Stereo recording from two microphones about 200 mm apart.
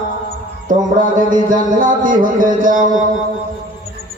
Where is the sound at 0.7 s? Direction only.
40° right (ahead or behind).